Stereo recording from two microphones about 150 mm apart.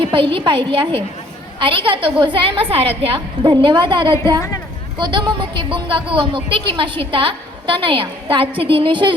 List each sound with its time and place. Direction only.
0.0 s speech: 35° right (ahead or behind)